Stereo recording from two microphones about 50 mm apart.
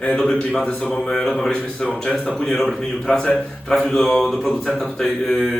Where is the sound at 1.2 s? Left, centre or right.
Centre.